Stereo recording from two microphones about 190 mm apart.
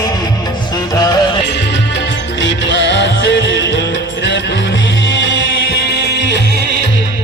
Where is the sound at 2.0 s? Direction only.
70° left (ahead or behind).